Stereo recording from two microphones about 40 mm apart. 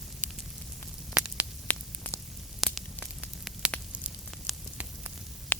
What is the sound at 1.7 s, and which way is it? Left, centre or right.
Static, left.